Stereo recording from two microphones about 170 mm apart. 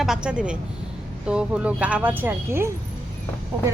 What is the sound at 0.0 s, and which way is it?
A woman's voice, 5° right (ahead or behind).